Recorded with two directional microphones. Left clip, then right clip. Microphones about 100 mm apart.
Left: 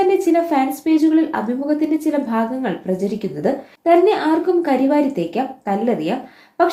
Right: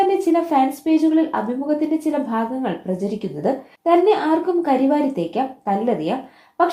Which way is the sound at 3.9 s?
30° right (ahead or behind).